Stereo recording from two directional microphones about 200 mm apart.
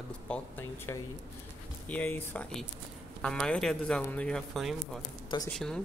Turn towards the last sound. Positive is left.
turn(degrees=5)  # may be behind; listen again after turning